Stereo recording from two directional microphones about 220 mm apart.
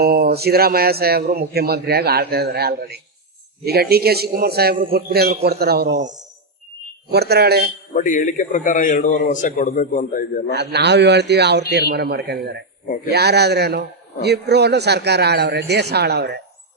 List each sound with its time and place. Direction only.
0.0 s a man's voice: 45° right (ahead or behind)
7.1 s a man's voice: 45° right (ahead or behind)
7.9 s a man's voice: 35° left (ahead or behind)
10.5 s a man's voice: 50° right (ahead or behind)